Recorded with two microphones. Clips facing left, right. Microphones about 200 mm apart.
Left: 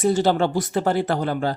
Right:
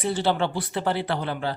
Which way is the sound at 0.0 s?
45° left (ahead or behind).